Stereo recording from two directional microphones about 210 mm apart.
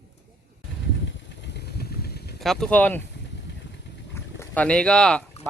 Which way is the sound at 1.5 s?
50° left (ahead or behind).